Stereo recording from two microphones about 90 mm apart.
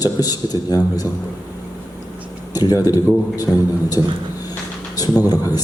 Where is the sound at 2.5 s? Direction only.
45° left (ahead or behind).